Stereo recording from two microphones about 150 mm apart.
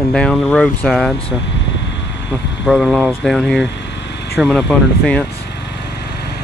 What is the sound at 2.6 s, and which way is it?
Speech, centre (ahead or behind).